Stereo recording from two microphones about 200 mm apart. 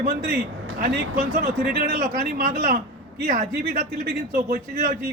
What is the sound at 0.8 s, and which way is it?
Speech, 45° right (ahead or behind).